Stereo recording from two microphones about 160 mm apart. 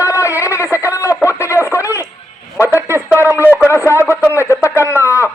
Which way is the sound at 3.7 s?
15° left (ahead or behind).